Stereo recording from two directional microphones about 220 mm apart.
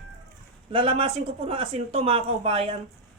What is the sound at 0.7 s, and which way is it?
Speech, 25° right (ahead or behind).